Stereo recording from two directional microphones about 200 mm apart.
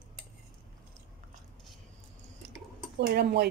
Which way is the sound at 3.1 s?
55° right (ahead or behind).